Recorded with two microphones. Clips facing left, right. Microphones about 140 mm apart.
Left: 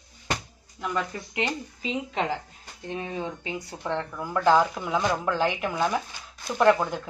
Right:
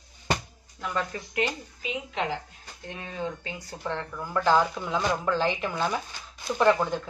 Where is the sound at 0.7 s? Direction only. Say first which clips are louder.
Left 1 dB; 5° left (ahead or behind).